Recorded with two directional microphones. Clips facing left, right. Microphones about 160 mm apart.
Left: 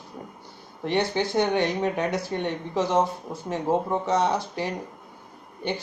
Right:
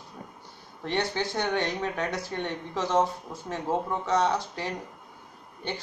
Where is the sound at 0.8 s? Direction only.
15° left (ahead or behind).